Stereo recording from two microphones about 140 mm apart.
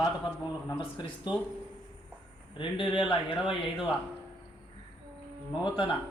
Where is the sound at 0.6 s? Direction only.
35° left (ahead or behind).